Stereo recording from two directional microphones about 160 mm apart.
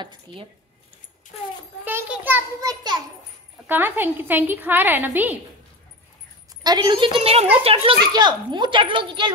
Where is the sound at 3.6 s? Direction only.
10° right (ahead or behind).